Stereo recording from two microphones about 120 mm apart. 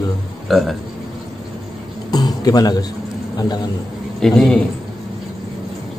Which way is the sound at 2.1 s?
35° left (ahead or behind).